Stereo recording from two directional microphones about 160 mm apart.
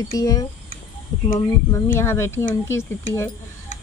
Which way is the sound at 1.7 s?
15° left (ahead or behind).